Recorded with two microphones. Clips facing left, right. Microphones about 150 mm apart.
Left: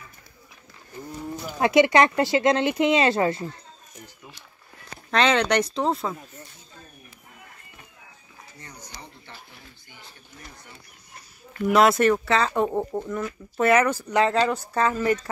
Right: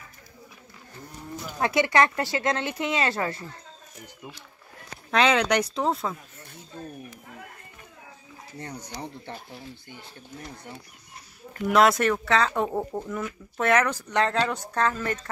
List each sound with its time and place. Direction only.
1.6 s speech: 20° left (ahead or behind)
5.1 s speech: 5° right (ahead or behind)
11.7 s speech: centre (ahead or behind)